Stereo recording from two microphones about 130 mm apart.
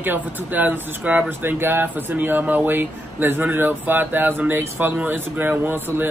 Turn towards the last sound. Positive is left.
turn(degrees=-15)  # may be behind; listen again after turning